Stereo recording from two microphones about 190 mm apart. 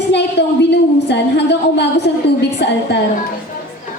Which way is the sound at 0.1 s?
65° left (ahead or behind).